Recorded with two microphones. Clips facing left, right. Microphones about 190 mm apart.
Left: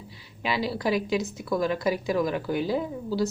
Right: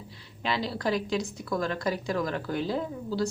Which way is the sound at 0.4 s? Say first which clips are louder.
Left 2 dB; 5° left (ahead or behind).